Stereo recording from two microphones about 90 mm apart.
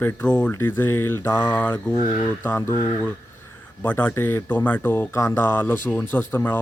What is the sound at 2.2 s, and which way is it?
Speech, 25° left (ahead or behind).